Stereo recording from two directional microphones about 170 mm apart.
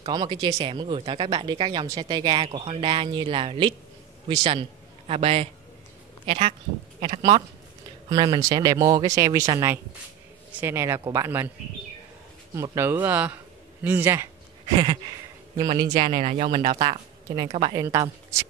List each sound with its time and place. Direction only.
0.0 s a man's voice: 25° right (ahead or behind)
12.5 s speech: 15° right (ahead or behind)
14.8 s speech: 25° right (ahead or behind)
16.1 s speech: 45° right (ahead or behind)